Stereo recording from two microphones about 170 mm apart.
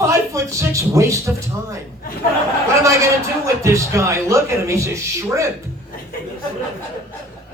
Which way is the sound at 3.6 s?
15° right (ahead or behind).